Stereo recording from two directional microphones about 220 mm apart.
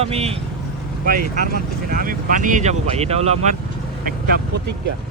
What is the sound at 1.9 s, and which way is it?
Speech, 40° right (ahead or behind).